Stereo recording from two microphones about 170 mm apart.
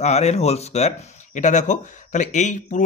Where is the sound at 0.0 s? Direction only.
40° left (ahead or behind).